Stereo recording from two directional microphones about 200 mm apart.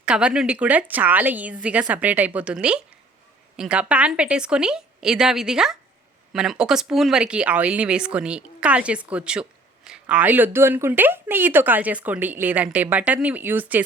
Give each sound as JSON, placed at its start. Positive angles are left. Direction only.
{"t": 0.0, "sound": "speech", "side_deg": -5}